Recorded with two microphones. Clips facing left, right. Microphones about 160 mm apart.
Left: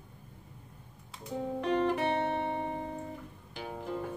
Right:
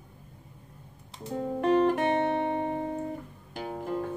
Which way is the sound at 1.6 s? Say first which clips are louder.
Right 6 dB; 45° right (ahead or behind).